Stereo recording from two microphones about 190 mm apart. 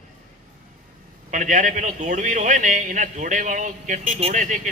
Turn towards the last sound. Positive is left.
turn(degrees=-40)  # may be behind; listen again after turning